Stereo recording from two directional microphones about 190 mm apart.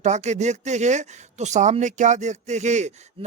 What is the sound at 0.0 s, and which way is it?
Speech, 40° right (ahead or behind).